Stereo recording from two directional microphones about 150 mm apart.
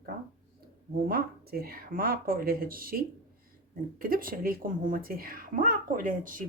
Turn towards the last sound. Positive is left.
turn(degrees=-65)  # may be behind; listen again after turning